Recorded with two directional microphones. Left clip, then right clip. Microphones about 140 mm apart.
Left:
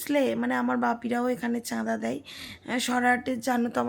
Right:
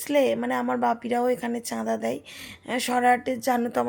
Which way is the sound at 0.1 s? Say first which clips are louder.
Right 3 dB; 10° right (ahead or behind).